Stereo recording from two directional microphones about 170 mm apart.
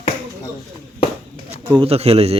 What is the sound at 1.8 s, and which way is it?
Speech, 35° right (ahead or behind).